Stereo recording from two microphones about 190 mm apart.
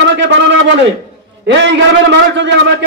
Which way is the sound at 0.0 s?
70° right (ahead or behind).